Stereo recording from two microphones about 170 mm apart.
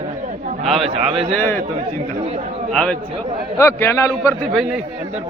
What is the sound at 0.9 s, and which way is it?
A man's voice, 35° right (ahead or behind).